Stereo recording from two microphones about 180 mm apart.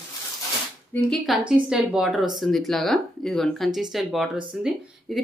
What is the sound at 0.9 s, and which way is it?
A woman's voice, centre (ahead or behind).